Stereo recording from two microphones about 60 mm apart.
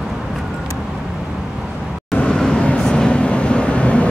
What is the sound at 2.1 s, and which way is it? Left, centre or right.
Vehicle, centre.